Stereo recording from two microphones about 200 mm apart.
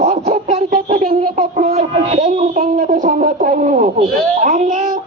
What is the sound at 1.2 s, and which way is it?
Speech, 30° right (ahead or behind).